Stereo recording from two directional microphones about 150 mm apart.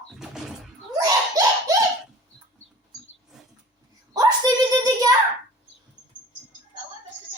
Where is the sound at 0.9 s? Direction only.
25° right (ahead or behind).